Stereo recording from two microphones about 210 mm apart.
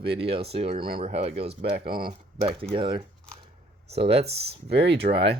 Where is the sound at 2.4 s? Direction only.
25° right (ahead or behind).